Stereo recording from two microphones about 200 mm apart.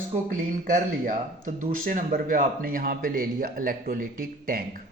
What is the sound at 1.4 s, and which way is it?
Speech, 40° right (ahead or behind).